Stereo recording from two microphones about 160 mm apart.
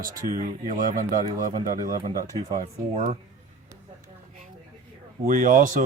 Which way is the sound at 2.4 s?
25° right (ahead or behind).